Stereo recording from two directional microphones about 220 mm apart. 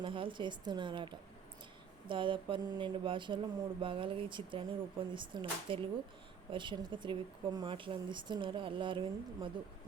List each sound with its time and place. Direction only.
0.0 s speech: 25° right (ahead or behind)